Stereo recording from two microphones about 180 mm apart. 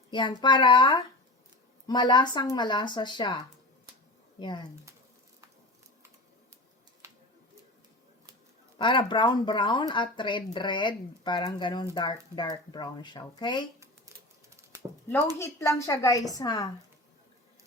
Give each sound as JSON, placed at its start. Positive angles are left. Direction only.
{"t": 0.1, "sound": "speech", "side_deg": 25}
{"t": 4.4, "sound": "speech", "side_deg": 25}
{"t": 8.8, "sound": "speech", "side_deg": 25}
{"t": 15.4, "sound": "a woman's voice", "side_deg": 15}